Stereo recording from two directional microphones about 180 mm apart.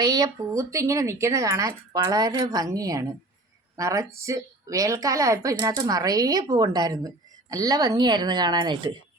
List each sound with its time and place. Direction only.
0.0 s a woman's voice: 20° right (ahead or behind)